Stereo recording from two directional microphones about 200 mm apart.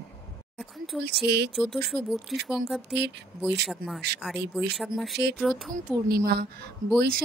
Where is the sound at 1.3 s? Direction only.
55° right (ahead or behind).